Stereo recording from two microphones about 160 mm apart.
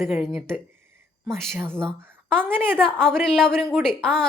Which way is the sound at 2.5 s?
15° right (ahead or behind).